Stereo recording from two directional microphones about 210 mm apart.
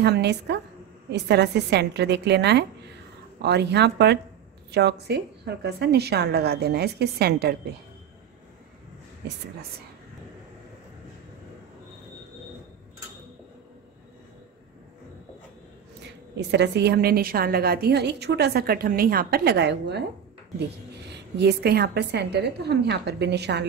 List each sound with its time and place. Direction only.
0.0 s a woman's voice: 55° right (ahead or behind)
16.0 s a woman's voice: 55° right (ahead or behind)